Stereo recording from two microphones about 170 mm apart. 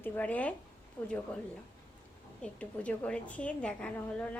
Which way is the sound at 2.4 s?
10° left (ahead or behind).